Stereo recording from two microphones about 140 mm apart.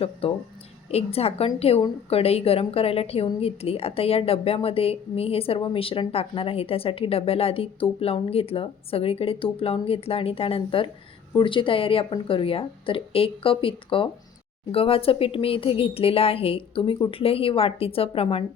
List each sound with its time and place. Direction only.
0.0 s speech: 45° left (ahead or behind)